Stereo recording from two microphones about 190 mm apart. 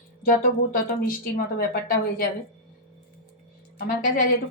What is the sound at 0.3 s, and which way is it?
A woman's voice, 45° left (ahead or behind).